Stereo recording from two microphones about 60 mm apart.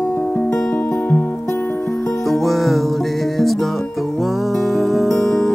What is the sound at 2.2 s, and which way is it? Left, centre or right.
Music, centre.